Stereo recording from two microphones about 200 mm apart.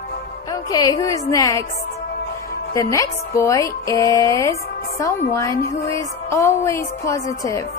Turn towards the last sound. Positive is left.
turn(degrees=15)  # may be behind; listen again after turning